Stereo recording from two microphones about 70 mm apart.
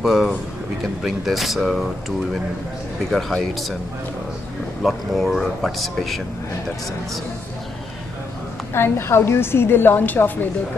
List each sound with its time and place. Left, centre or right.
0.0 s speech: centre
4.8 s speech: centre
8.7 s a woman's voice: left